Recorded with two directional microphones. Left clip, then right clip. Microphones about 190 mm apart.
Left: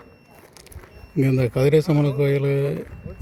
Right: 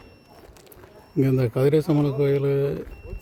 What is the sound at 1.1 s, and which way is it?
Speech, centre (ahead or behind).